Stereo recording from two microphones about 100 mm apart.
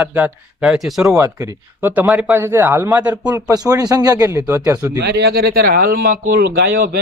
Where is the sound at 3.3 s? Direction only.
35° right (ahead or behind).